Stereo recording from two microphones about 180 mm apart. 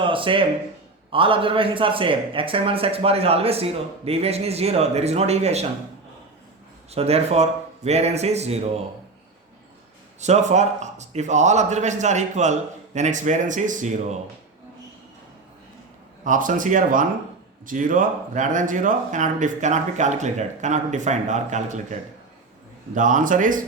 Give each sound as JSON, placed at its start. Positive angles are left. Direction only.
{"t": 0.0, "sound": "a sound", "side_deg": -30}
{"t": 1.1, "sound": "a man's voice", "side_deg": -30}
{"t": 6.9, "sound": "a man's voice", "side_deg": -35}
{"t": 10.2, "sound": "a man's voice", "side_deg": -40}
{"t": 16.2, "sound": "speech", "side_deg": -45}
{"t": 23.0, "sound": "speech", "side_deg": -45}